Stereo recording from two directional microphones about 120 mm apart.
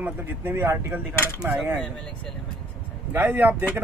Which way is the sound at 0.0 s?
15° right (ahead or behind).